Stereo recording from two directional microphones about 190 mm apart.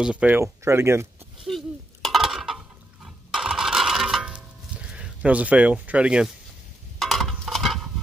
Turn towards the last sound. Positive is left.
turn(degrees=0)  # may be behind; listen again after turning